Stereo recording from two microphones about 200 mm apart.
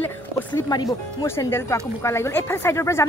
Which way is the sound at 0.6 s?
20° left (ahead or behind).